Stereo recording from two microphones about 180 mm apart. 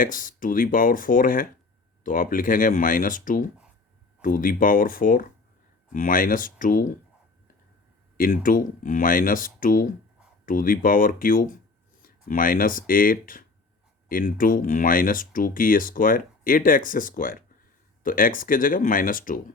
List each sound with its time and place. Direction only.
0.0 s speech: 50° left (ahead or behind)
8.2 s speech: 50° left (ahead or behind)